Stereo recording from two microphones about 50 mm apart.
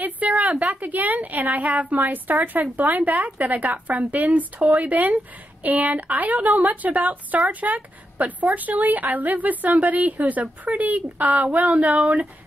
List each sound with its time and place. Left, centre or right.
0.4 s a woman's voice: right